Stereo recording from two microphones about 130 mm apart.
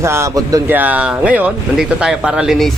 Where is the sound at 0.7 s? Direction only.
10° right (ahead or behind).